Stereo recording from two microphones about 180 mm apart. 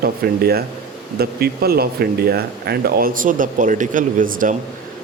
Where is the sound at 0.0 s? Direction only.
60° right (ahead or behind).